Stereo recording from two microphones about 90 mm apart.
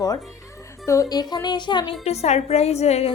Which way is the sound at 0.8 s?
40° left (ahead or behind).